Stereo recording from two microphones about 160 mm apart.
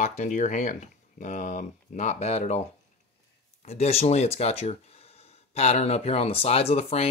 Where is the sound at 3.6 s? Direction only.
40° left (ahead or behind).